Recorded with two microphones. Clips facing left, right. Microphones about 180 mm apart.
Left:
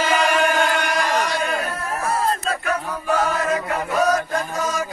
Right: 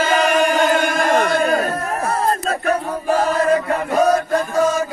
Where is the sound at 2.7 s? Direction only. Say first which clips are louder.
Right 5 dB; 35° right (ahead or behind).